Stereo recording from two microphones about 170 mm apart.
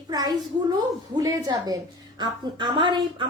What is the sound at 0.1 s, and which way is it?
A child's voice, 25° right (ahead or behind).